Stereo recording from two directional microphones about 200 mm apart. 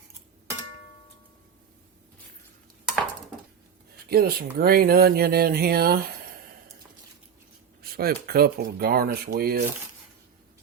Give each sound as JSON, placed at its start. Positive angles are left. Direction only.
{"t": 4.1, "sound": "speech", "side_deg": -50}
{"t": 7.8, "sound": "speech", "side_deg": -50}